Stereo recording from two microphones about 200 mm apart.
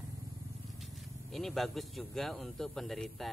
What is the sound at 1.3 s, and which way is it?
Speech, centre (ahead or behind).